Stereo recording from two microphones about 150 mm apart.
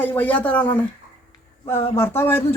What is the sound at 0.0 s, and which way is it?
Speech, 10° left (ahead or behind).